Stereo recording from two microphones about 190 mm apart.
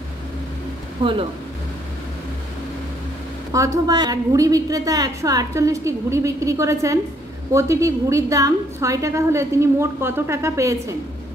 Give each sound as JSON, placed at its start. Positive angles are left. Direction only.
{"t": 1.0, "sound": "speech", "side_deg": -25}
{"t": 3.5, "sound": "a woman's voice", "side_deg": -15}